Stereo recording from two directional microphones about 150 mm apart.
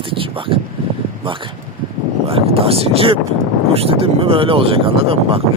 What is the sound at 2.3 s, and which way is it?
Speech, 40° right (ahead or behind).